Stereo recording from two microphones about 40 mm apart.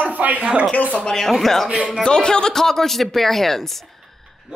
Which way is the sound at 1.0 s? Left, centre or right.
Centre.